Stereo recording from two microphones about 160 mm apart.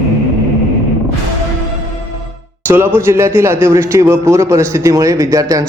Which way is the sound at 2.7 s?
15° right (ahead or behind).